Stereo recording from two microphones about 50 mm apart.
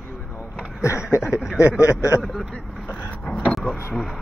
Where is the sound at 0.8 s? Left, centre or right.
Left.